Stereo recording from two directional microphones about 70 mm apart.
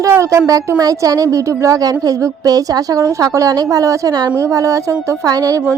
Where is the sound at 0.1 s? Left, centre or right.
Right.